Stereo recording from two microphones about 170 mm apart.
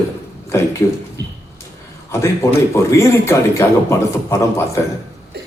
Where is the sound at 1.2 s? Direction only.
85° right.